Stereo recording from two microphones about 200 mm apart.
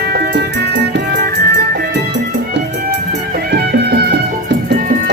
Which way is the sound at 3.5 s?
50° right (ahead or behind).